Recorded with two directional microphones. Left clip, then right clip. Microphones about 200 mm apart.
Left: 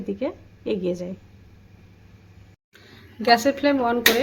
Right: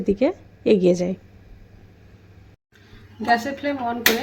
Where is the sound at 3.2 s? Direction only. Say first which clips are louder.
Left 3 dB; 40° left (ahead or behind).